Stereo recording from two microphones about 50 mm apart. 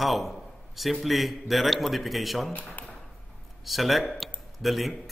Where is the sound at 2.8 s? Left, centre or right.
Left.